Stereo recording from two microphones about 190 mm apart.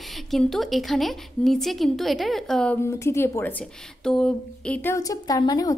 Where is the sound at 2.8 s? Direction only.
15° left (ahead or behind).